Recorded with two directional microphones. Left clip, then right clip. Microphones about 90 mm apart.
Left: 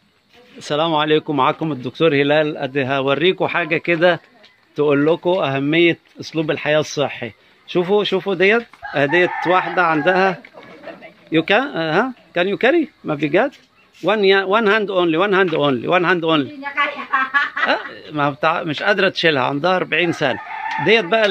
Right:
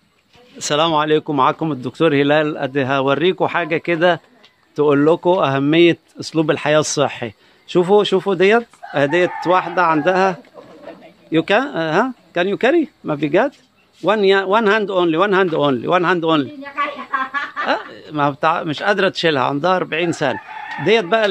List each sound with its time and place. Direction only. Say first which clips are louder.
0.6 s speech: right 2 dB; 10° right (ahead or behind)
0.9 s speech: right 1 dB; centre (ahead or behind)
1.8 s a man's voice: left 1 dB; 25° right (ahead or behind); by 4.2 s 10° right (ahead or behind)
4.7 s speech: right 2 dB; 25° right (ahead or behind)
11.3 s speech: even; 10° right (ahead or behind)